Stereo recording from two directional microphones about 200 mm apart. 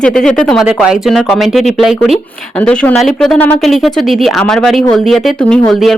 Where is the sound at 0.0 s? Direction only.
5° left (ahead or behind).